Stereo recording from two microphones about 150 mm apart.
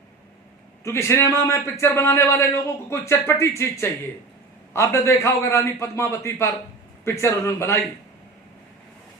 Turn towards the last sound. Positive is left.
turn(degrees=20)  # may be behind; listen again after turning